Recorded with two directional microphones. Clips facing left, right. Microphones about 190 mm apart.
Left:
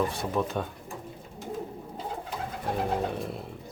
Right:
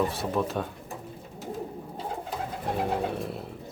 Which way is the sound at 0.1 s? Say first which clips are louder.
Right 1 dB; centre (ahead or behind).